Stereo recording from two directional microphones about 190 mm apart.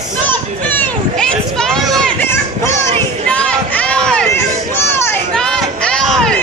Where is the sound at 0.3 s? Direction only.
10° left (ahead or behind).